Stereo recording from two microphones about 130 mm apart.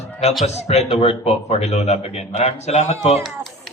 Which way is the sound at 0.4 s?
55° left (ahead or behind).